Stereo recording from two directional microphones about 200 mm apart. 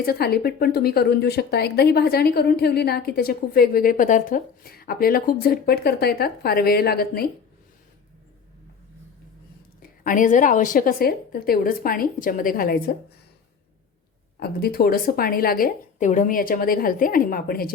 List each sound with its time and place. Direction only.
0.0 s a woman's voice: 50° left (ahead or behind)
10.0 s a woman's voice: 40° left (ahead or behind)
14.3 s a woman's voice: 50° left (ahead or behind)